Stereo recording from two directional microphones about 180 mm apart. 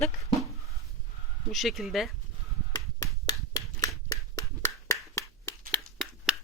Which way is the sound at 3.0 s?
20° left (ahead or behind).